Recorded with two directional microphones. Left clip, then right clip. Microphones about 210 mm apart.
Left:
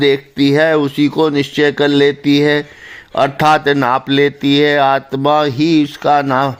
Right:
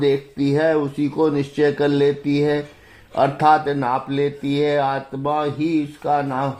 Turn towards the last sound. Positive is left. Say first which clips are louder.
# left 8 dB
turn(degrees=45)  # may be behind; listen again after turning